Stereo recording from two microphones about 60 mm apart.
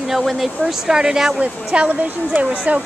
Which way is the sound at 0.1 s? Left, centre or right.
Centre.